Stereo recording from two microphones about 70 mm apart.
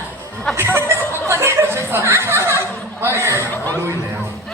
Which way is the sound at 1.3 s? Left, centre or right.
Right.